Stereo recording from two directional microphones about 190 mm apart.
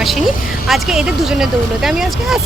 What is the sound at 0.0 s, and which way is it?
Speech, centre (ahead or behind).